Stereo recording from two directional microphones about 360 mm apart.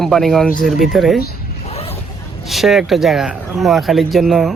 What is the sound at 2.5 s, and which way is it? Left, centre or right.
Speech, centre.